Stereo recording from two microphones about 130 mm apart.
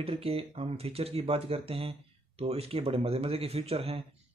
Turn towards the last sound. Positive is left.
turn(degrees=-50)  # may be behind; listen again after turning